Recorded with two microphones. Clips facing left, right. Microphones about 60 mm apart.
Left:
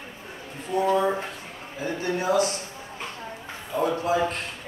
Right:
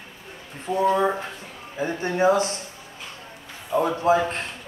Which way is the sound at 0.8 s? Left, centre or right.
Right.